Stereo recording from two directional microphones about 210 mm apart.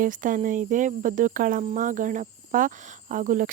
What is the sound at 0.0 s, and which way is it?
Speech, 40° right (ahead or behind).